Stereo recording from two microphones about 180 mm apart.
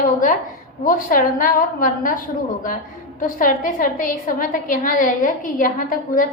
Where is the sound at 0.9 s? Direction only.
50° left (ahead or behind).